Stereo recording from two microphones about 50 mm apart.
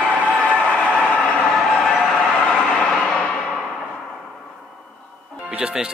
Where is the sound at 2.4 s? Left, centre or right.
Centre.